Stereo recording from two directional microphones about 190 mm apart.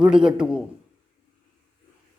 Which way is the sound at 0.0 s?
5° right (ahead or behind).